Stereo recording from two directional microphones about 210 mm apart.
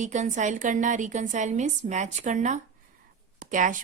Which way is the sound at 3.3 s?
40° right (ahead or behind).